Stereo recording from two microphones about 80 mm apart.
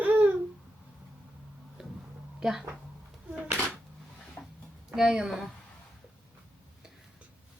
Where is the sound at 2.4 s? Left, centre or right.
Centre.